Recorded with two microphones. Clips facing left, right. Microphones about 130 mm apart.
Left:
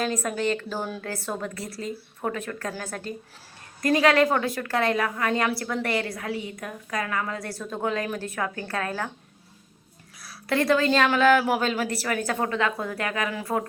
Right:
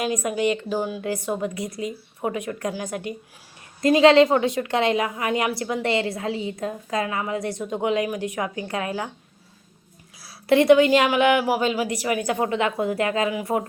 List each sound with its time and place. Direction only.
0.0 s a woman's voice: 15° right (ahead or behind)
10.2 s a woman's voice: 25° right (ahead or behind)